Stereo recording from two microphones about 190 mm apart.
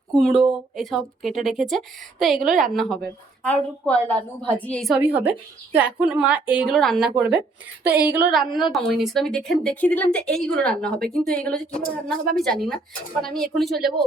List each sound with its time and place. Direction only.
0.1 s a woman's voice: centre (ahead or behind)
2.5 s a woman's voice: 45° right (ahead or behind)
3.4 s a woman's voice: 5° left (ahead or behind)